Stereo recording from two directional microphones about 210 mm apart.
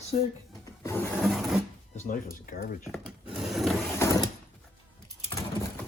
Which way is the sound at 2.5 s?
40° left (ahead or behind).